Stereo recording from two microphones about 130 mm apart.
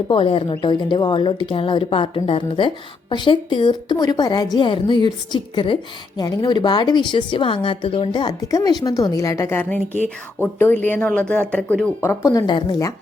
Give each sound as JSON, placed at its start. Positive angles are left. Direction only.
{"t": 0.1, "sound": "a woman's voice", "side_deg": 45}
{"t": 11.9, "sound": "a woman's voice", "side_deg": 20}
{"t": 12.5, "sound": "a woman's voice", "side_deg": 40}